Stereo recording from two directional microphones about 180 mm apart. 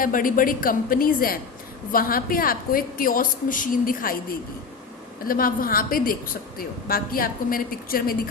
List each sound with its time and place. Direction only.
0.0 s a woman's voice: 50° left (ahead or behind)